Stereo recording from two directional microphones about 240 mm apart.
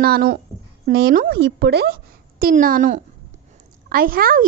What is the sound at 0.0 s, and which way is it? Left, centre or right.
A woman's voice, right.